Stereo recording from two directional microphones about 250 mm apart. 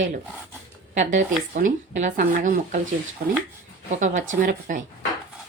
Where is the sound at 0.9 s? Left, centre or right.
Right.